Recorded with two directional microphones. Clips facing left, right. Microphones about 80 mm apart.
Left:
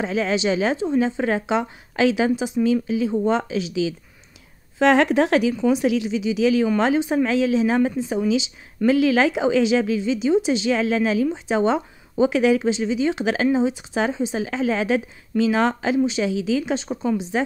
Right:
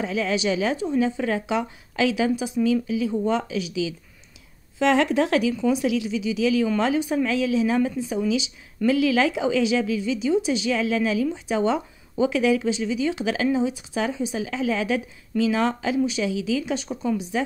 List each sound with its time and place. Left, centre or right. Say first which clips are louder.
0.0 s speech: left 2 dB; left
4.7 s speech: left 3 dB; left